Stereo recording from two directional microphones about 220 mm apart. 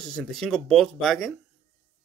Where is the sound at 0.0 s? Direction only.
Centre (ahead or behind).